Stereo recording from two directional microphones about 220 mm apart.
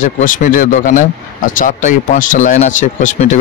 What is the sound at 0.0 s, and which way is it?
Speech, 35° left (ahead or behind).